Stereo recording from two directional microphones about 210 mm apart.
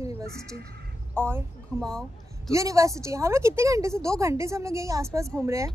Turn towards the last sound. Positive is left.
turn(degrees=-15)  # may be behind; listen again after turning